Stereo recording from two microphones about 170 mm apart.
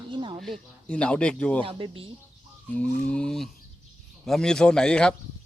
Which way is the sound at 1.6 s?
30° right (ahead or behind).